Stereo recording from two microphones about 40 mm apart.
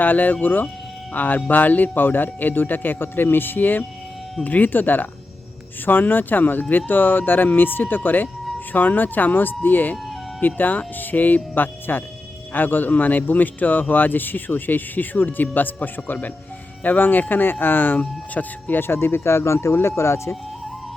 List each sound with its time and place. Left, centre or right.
0.0 s a man's voice: left
18.9 s speech: left